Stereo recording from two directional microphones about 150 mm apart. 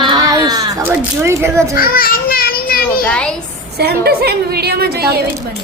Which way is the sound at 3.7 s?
90° right.